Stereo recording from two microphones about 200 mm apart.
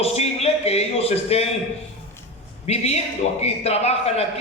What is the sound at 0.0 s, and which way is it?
A man's voice, 30° left (ahead or behind).